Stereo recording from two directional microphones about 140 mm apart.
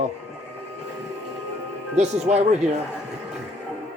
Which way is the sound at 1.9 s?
55° right (ahead or behind).